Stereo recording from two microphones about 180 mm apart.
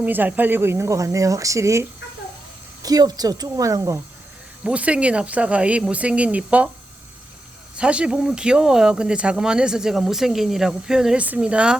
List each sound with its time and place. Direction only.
0.0 s speech: 10° right (ahead or behind)
4.6 s speech: 5° right (ahead or behind)
7.8 s speech: 5° right (ahead or behind)